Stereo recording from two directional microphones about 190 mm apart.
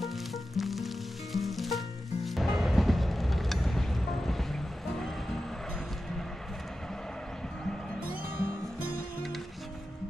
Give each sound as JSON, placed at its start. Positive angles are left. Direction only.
{"t": 0.0, "sound": "music", "side_deg": 0}
{"t": 8.1, "sound": "music", "side_deg": -50}